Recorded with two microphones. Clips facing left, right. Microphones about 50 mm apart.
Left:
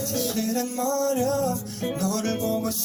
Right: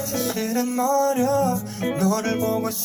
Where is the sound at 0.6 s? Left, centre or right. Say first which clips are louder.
Right 8 dB; right.